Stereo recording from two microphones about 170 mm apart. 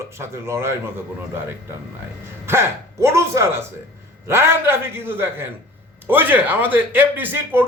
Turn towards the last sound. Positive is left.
turn(degrees=-10)  # may be behind; listen again after turning